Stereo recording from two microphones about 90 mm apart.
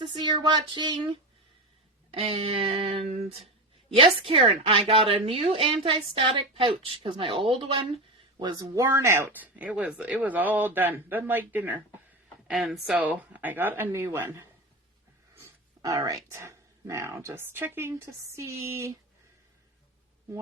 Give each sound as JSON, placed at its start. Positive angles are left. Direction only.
{"t": 0.0, "sound": "a sound", "side_deg": -60}
{"t": 2.0, "sound": "speech", "side_deg": -90}
{"t": 8.5, "sound": "speech", "side_deg": -35}
{"t": 9.3, "sound": "speech", "side_deg": -20}
{"t": 12.5, "sound": "speech", "side_deg": -5}
{"t": 13.0, "sound": "speech", "side_deg": -20}
{"t": 15.8, "sound": "speech", "side_deg": -40}